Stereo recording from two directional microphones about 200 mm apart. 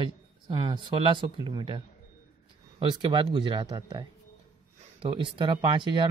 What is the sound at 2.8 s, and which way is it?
Speech, 25° right (ahead or behind).